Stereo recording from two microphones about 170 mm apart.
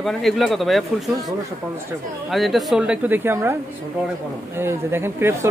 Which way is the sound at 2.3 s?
Centre (ahead or behind).